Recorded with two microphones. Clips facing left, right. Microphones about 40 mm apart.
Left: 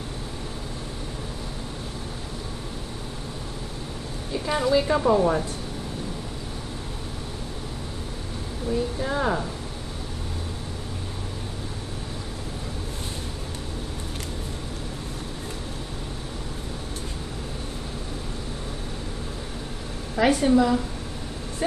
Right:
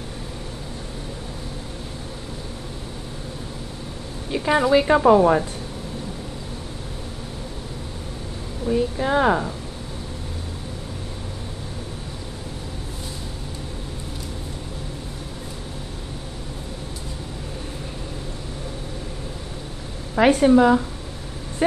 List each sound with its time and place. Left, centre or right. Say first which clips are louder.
4.5 s a woman's voice: right 5 dB; right
8.6 s a woman's voice: right 5 dB; right
20.2 s a woman's voice: right 5 dB; right